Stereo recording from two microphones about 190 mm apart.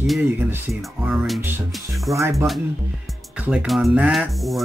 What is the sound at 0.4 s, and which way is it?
Speech, 10° right (ahead or behind).